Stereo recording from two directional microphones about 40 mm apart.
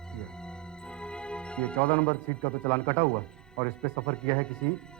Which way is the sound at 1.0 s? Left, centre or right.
Left.